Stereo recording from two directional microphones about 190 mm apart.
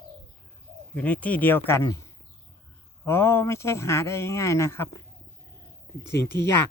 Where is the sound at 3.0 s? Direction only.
15° left (ahead or behind).